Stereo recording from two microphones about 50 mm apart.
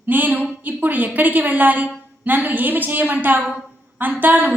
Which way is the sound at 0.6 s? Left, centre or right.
Right.